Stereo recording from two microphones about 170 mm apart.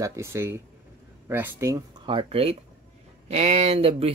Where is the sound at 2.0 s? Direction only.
35° right (ahead or behind).